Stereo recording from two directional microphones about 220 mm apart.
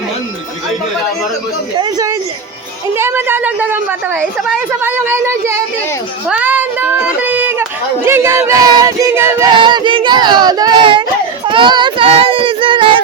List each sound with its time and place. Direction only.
1.8 s a woman's voice: 15° right (ahead or behind)
9.6 s a sound: 20° right (ahead or behind)
11.4 s children playing: 20° right (ahead or behind)